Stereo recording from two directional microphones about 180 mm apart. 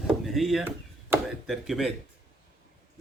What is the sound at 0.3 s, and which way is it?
Speech, centre (ahead or behind).